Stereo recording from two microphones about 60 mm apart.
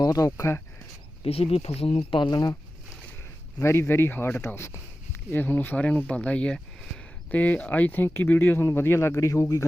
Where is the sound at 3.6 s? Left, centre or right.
Left.